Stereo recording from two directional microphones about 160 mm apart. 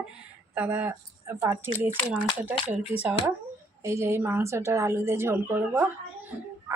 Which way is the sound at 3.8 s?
15° right (ahead or behind).